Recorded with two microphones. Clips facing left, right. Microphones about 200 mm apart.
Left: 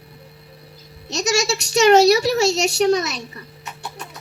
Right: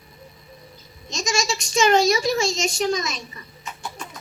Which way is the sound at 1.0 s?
70° left (ahead or behind).